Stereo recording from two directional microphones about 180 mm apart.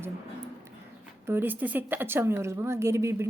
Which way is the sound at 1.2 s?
10° right (ahead or behind).